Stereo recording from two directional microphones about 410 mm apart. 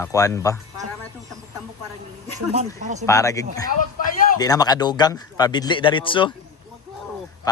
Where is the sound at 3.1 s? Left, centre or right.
Centre.